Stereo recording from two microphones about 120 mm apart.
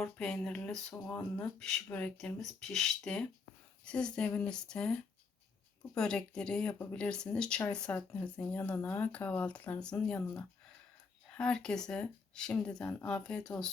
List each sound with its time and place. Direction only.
0.0 s speech: 5° left (ahead or behind)
6.0 s speech: 5° left (ahead or behind)